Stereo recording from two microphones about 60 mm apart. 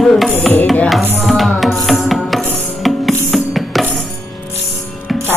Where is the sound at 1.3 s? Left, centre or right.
Centre.